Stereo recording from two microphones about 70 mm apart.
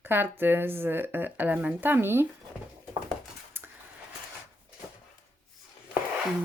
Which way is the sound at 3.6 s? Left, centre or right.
Right.